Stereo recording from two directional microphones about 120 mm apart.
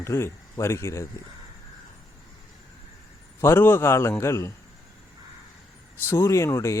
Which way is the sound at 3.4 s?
20° left (ahead or behind).